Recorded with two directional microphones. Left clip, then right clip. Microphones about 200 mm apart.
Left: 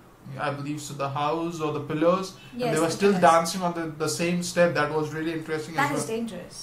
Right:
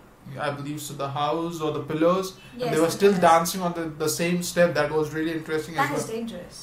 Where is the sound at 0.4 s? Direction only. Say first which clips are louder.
Even; 10° right (ahead or behind).